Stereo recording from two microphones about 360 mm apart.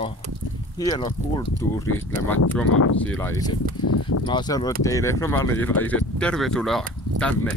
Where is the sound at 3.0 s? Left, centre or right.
Centre.